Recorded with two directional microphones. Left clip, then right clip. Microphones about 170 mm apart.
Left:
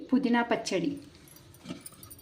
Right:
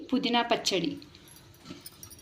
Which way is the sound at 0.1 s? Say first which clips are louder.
Right 1 dB; 30° left (ahead or behind).